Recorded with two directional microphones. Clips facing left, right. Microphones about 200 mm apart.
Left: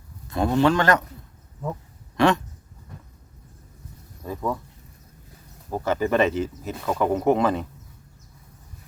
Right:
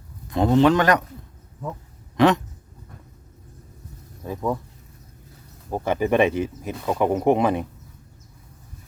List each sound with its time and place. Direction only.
0.3 s speech: 20° right (ahead or behind)
2.1 s a sound: 20° right (ahead or behind)
4.2 s speech: 10° right (ahead or behind)
5.7 s speech: 15° right (ahead or behind)